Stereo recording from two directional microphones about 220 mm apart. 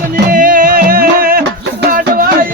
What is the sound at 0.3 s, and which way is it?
Music, 40° right (ahead or behind).